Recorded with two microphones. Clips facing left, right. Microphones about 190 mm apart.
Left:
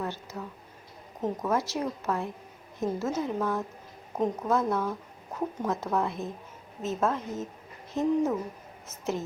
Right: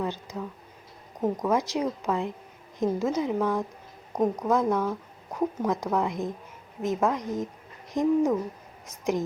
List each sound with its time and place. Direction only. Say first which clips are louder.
0.0 s speech: right 4 dB; 15° right (ahead or behind)